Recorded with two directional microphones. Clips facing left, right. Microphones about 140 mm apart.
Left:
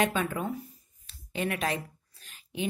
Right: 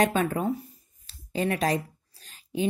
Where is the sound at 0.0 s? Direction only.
40° right (ahead or behind).